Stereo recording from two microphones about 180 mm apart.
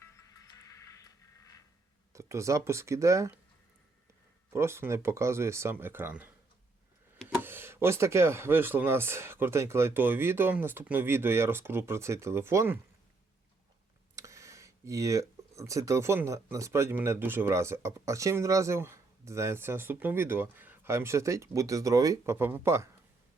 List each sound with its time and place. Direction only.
0.0 s music: 15° left (ahead or behind)
2.1 s speech: 15° right (ahead or behind)
4.5 s speech: 15° right (ahead or behind)
14.2 s speech: 15° right (ahead or behind)